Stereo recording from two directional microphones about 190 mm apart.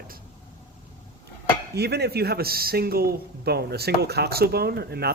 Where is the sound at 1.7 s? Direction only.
60° right (ahead or behind).